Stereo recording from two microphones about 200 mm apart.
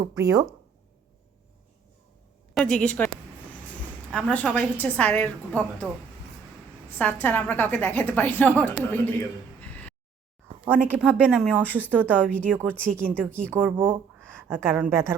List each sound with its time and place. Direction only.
0.0 s a woman's voice: 15° right (ahead or behind)
2.6 s speech: 5° left (ahead or behind)
4.1 s a woman's voice: 5° left (ahead or behind)
7.0 s a woman's voice: 10° left (ahead or behind)
9.6 s a sound: 10° left (ahead or behind)
10.8 s a woman's voice: 5° right (ahead or behind)
12.2 s a woman's voice: 5° left (ahead or behind)
12.5 s a woman's voice: 10° right (ahead or behind)
12.7 s a woman's voice: 5° left (ahead or behind)
13.5 s a woman's voice: 10° right (ahead or behind)